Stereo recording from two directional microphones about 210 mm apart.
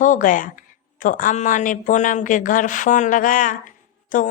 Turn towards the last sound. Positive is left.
turn(degrees=40)  # may be behind; listen again after turning